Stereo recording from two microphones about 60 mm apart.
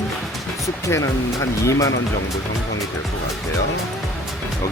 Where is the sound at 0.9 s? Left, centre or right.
Left.